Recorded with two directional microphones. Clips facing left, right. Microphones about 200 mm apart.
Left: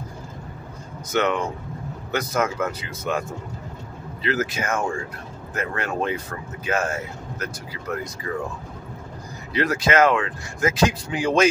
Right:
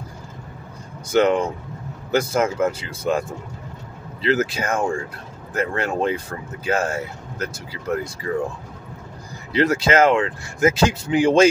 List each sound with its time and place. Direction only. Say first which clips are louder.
1.1 s speech: right 5 dB; 30° right (ahead or behind)
9.5 s speech: right 3 dB; 30° right (ahead or behind)